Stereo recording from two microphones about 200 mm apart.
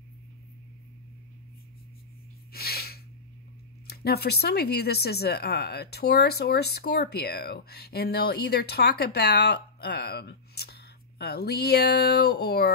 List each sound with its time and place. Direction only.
2.5 s sneeze: 50° left (ahead or behind)
3.8 s speech: 50° left (ahead or behind)